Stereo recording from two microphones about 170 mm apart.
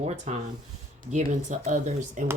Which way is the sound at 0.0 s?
40° right (ahead or behind).